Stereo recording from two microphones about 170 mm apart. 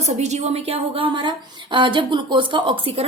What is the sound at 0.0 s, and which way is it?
A woman's voice, 40° right (ahead or behind).